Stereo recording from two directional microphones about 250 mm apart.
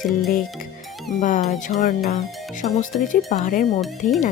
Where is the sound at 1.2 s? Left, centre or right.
Left.